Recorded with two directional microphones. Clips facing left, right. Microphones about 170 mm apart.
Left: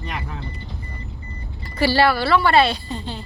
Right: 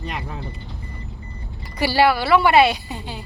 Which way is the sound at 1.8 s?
15° right (ahead or behind).